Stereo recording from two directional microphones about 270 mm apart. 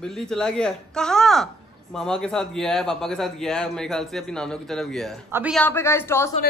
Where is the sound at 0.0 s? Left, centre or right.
Centre.